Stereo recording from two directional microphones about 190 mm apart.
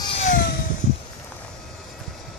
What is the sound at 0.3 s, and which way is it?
Vehicle, 45° left (ahead or behind).